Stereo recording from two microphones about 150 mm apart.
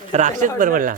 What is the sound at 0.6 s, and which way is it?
Speech, 65° right (ahead or behind).